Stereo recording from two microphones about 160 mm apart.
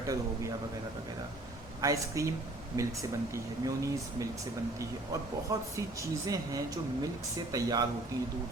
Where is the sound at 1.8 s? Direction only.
20° right (ahead or behind).